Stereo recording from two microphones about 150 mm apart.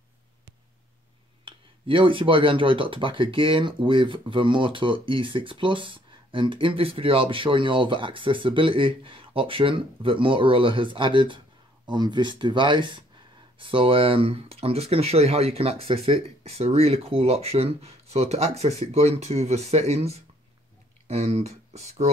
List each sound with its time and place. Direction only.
1.4 s speech: 35° right (ahead or behind)